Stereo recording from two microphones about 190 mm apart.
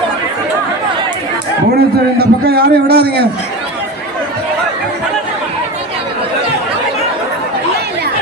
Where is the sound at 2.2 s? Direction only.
55° right (ahead or behind).